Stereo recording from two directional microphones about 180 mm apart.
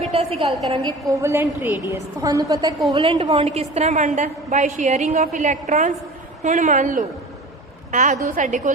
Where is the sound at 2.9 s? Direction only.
30° right (ahead or behind).